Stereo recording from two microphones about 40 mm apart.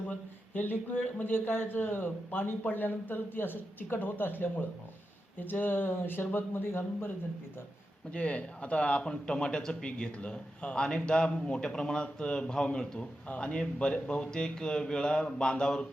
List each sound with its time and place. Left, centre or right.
0.1 s a man's voice: left
8.1 s a man's voice: left
12.0 s a man's voice: left
13.2 s a man's voice: left